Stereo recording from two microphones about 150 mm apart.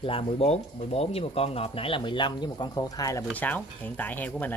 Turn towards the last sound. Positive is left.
turn(degrees=10)  # may be behind; listen again after turning